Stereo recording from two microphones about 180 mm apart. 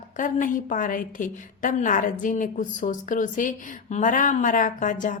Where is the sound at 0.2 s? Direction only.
45° left (ahead or behind).